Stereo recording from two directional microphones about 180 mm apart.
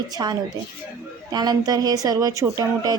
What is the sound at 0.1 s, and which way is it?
Speech, 20° right (ahead or behind).